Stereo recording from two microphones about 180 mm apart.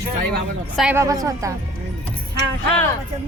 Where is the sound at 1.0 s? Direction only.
20° right (ahead or behind).